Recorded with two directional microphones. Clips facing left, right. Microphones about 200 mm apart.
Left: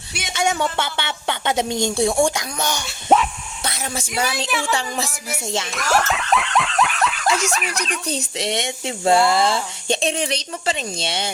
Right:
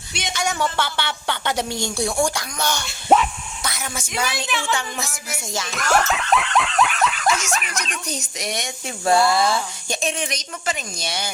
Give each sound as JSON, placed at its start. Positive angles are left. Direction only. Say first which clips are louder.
{"t": 0.3, "sound": "speech", "louder": "left 3 dB", "side_deg": 25}
{"t": 2.8, "sound": "speech", "louder": "even", "side_deg": 0}
{"t": 3.6, "sound": "speech", "louder": "left 3 dB", "side_deg": 30}
{"t": 4.7, "sound": "music", "louder": "left 2 dB", "side_deg": 30}
{"t": 5.7, "sound": "speech", "louder": "right 1 dB", "side_deg": 0}
{"t": 8.0, "sound": "speech", "louder": "left 4 dB", "side_deg": 30}